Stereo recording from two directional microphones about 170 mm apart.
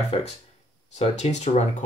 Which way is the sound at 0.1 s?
30° left (ahead or behind).